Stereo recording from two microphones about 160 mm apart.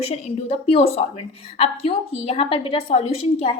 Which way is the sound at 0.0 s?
40° left (ahead or behind).